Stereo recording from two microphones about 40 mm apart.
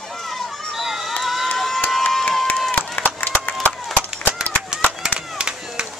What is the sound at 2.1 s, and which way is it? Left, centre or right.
Crowd, centre.